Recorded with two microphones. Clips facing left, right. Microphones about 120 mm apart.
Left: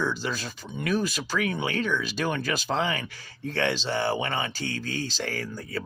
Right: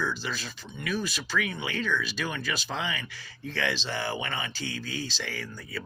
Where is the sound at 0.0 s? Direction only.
40° left (ahead or behind).